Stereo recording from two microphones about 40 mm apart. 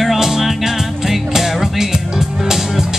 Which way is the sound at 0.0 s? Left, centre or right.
Centre.